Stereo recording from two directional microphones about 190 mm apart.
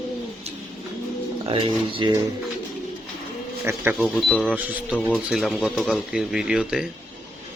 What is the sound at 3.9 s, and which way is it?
Speech, centre (ahead or behind).